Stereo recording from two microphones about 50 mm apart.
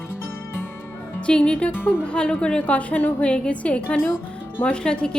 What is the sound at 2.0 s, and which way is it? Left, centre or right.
A woman's voice, centre.